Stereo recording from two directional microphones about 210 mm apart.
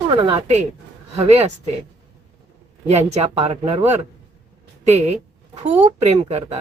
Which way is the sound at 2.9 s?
30° right (ahead or behind).